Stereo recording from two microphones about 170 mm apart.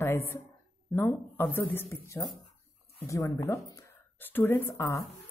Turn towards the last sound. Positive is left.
turn(degrees=20)  # may be behind; listen again after turning